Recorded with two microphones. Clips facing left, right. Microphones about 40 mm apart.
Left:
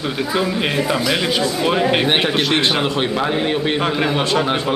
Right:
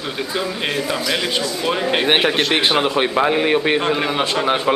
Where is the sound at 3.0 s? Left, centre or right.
Centre.